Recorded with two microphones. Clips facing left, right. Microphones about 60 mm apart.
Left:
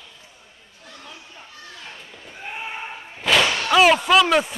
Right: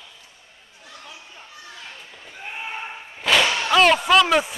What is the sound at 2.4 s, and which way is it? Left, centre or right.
Slam, centre.